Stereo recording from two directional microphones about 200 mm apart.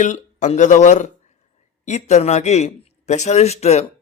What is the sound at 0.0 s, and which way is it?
A man's voice, 35° left (ahead or behind).